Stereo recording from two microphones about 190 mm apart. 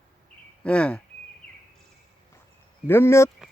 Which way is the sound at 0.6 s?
5° left (ahead or behind).